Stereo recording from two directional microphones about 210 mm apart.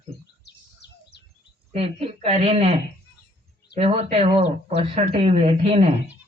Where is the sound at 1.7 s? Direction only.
30° right (ahead or behind).